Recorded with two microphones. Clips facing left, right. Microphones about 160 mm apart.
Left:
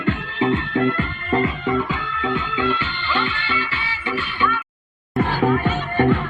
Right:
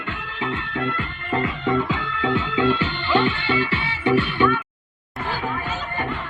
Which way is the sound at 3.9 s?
60° right (ahead or behind).